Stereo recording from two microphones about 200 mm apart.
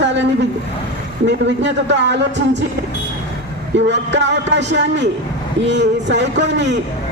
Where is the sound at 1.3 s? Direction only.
60° right (ahead or behind).